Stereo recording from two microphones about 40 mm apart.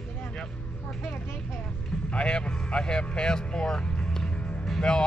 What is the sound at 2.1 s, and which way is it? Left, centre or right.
Speech, left.